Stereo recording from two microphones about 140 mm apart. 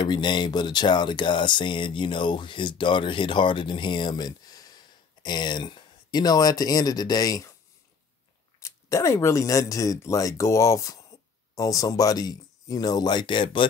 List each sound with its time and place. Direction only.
0.0 s speech: 30° left (ahead or behind)
8.5 s speech: 20° left (ahead or behind); by 13.7 s 35° left (ahead or behind)